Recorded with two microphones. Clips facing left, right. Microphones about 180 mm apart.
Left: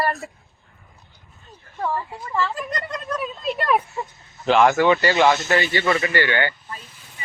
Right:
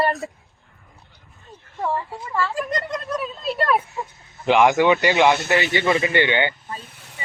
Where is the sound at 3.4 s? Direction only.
35° right (ahead or behind).